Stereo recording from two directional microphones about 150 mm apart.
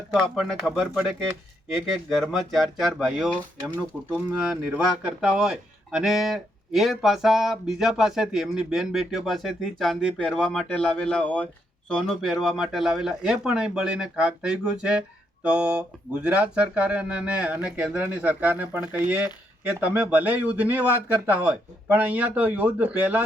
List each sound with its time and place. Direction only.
0.1 s speech: centre (ahead or behind)